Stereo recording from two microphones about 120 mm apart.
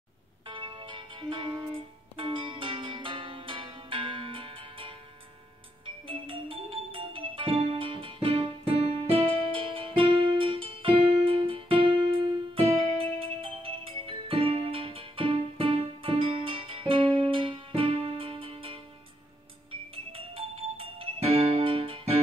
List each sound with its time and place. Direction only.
0.5 s music: 40° right (ahead or behind)
12.6 s music: 55° right (ahead or behind)